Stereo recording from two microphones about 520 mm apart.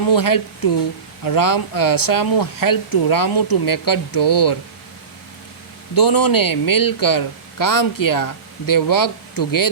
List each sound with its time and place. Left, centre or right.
0.1 s speech: left
5.9 s speech: left